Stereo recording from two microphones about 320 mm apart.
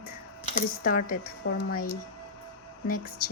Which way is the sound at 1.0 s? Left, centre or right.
Left.